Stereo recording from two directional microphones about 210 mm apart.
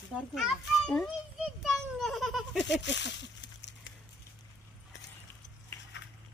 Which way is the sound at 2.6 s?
60° left (ahead or behind).